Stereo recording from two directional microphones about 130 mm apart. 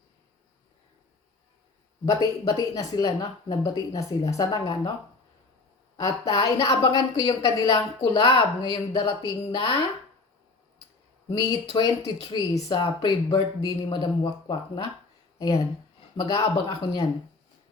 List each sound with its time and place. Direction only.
2.0 s speech: 30° left (ahead or behind)
6.0 s speech: 25° left (ahead or behind)
11.6 s speech: 45° left (ahead or behind)